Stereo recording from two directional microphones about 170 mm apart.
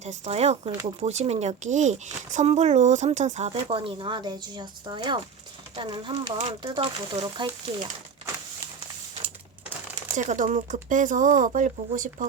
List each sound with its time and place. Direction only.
0.0 s speech: 40° right (ahead or behind)
5.7 s speech: 30° right (ahead or behind)
10.2 s speech: 45° right (ahead or behind)